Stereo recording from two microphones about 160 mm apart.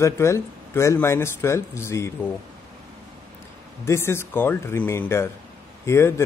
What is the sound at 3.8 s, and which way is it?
Speech, 15° left (ahead or behind).